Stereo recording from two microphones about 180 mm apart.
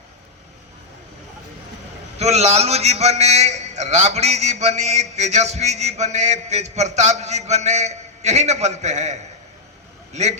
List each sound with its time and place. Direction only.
2.1 s a man's voice: 35° right (ahead or behind)